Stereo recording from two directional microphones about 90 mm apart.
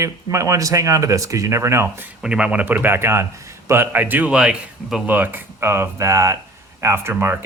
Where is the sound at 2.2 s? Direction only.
10° right (ahead or behind).